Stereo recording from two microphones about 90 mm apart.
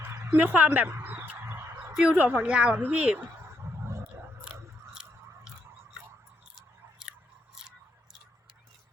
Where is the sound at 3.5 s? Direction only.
30° right (ahead or behind).